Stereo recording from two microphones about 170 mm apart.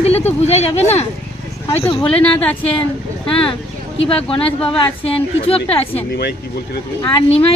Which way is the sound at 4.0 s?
35° left (ahead or behind).